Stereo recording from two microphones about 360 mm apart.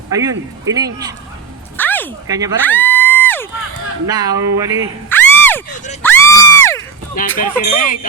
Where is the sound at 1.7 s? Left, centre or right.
Centre.